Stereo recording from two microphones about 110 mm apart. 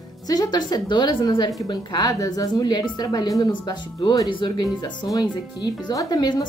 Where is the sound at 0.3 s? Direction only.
40° left (ahead or behind).